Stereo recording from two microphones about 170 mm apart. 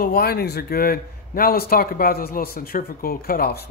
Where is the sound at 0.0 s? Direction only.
65° left (ahead or behind).